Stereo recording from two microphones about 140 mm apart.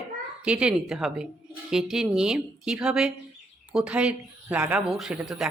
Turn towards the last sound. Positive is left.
turn(degrees=-5)  # may be behind; listen again after turning